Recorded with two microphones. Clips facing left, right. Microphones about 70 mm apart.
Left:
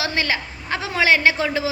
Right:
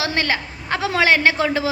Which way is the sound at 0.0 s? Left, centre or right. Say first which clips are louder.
Right 1 dB; right.